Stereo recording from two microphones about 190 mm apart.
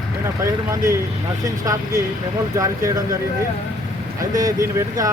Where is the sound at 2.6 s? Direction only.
15° right (ahead or behind).